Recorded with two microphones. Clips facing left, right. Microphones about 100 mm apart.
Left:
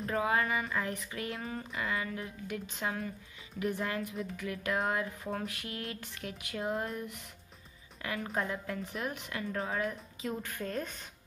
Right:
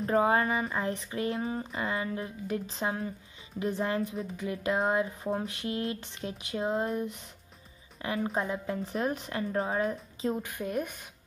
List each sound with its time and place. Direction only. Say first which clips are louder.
0.0 s a woman's voice: right 5 dB; 35° right (ahead or behind)
10.3 s a woman's voice: right 1 dB; 15° right (ahead or behind)